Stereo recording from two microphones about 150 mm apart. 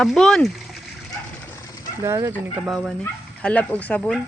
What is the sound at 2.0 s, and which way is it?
Speech, 20° right (ahead or behind).